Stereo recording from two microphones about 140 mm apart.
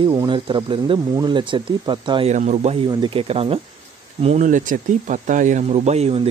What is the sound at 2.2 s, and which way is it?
Speech, 55° right (ahead or behind).